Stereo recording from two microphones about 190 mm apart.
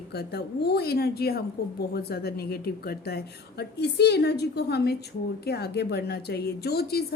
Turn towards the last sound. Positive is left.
turn(degrees=55)  # may be behind; listen again after turning